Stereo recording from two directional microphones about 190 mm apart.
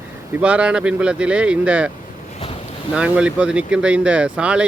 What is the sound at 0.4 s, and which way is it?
Speech, 5° right (ahead or behind).